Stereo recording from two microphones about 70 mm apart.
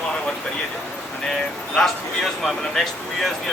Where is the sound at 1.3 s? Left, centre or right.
Centre.